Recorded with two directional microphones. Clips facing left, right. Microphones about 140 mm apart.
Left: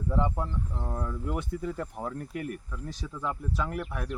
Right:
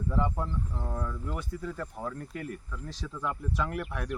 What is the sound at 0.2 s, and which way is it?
Speech, 10° left (ahead or behind).